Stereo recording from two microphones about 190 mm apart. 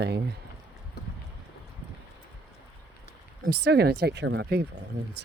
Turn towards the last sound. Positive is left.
turn(degrees=-60)  # may be behind; listen again after turning